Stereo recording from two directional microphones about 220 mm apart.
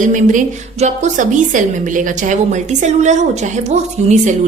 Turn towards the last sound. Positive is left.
turn(degrees=-30)  # may be behind; listen again after turning